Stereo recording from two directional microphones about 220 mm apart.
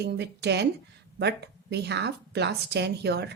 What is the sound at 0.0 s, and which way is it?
Speech, 50° right (ahead or behind).